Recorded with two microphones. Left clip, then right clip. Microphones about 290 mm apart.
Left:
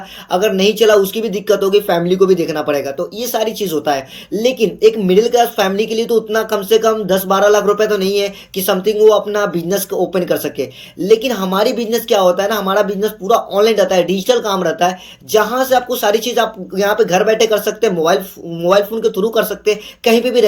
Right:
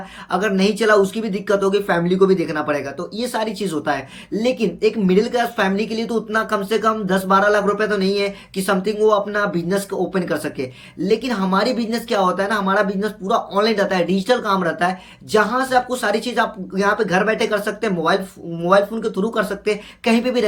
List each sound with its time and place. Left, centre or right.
0.3 s speech: centre